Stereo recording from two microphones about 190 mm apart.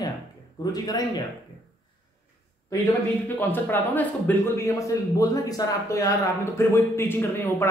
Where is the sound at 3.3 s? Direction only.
10° left (ahead or behind).